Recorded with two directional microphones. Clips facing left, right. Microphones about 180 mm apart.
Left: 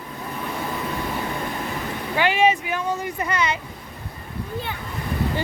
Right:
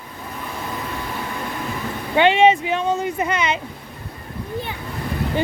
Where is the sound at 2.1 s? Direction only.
25° right (ahead or behind).